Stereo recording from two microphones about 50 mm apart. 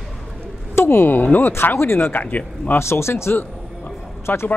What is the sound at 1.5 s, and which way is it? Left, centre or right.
Speech, left.